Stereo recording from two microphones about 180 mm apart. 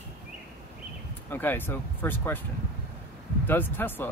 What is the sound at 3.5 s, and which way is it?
Speech, 10° left (ahead or behind).